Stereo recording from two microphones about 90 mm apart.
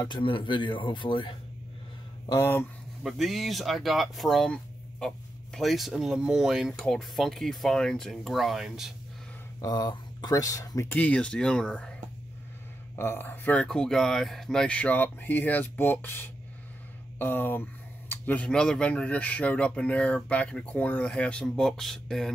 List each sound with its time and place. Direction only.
0.1 s speech: 70° left (ahead or behind)
3.0 s speech: centre (ahead or behind)
9.6 s speech: 45° left (ahead or behind)
10.9 s speech: 15° left (ahead or behind)
12.9 s speech: 25° left (ahead or behind); by 22.3 s 5° left (ahead or behind)